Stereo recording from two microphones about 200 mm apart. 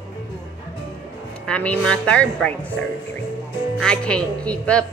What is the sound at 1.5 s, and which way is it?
Speech, 5° left (ahead or behind).